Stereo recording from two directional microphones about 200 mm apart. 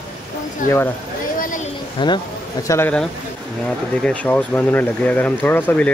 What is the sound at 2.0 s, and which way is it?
Speech, 25° left (ahead or behind).